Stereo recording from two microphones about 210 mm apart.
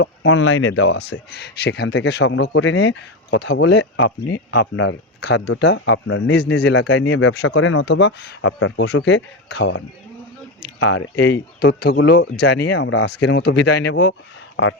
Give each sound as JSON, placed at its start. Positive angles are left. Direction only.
{"t": 0.0, "sound": "speech", "side_deg": 65}
{"t": 6.5, "sound": "speech", "side_deg": 50}